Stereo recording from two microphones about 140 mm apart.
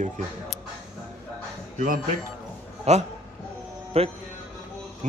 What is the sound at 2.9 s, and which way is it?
A man's voice, 50° right (ahead or behind).